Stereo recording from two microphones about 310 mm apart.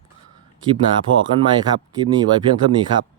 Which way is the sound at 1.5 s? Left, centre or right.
Centre.